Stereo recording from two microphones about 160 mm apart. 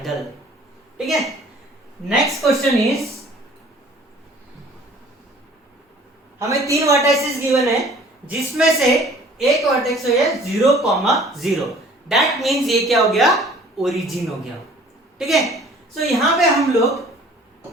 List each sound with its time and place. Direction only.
0.9 s a woman's voice: centre (ahead or behind)
2.3 s a woman's voice: centre (ahead or behind)
6.5 s a woman's voice: 20° right (ahead or behind)
7.5 s a woman's voice: centre (ahead or behind)